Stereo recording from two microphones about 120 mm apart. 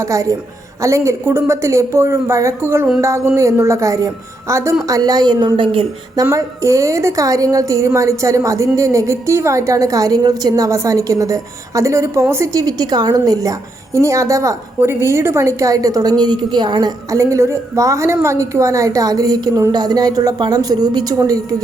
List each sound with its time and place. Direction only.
0.0 s a woman's voice: 25° right (ahead or behind); by 5.8 s 45° right (ahead or behind)
6.3 s a woman's voice: 25° right (ahead or behind)